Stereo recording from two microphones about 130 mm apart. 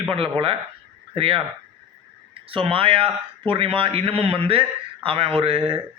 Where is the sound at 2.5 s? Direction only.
45° right (ahead or behind).